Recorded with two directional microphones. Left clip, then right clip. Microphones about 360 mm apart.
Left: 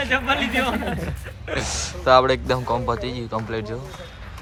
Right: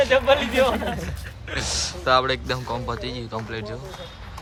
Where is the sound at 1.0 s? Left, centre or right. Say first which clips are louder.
Left 3 dB; centre.